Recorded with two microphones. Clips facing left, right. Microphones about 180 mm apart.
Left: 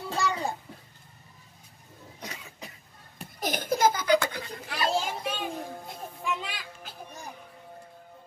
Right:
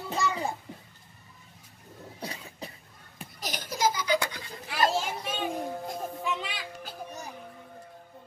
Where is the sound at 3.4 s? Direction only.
50° left (ahead or behind).